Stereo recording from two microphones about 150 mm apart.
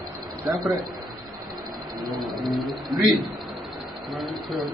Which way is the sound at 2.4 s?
Centre (ahead or behind).